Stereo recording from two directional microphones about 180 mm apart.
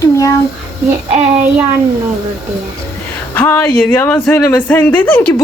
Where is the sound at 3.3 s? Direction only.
10° left (ahead or behind).